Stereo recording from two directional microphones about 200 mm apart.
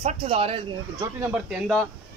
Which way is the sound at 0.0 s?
30° right (ahead or behind).